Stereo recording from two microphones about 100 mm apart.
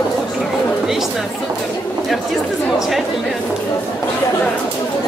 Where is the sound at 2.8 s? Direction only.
Centre (ahead or behind).